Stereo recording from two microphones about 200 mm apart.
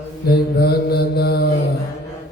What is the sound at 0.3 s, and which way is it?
Mantra, 50° left (ahead or behind).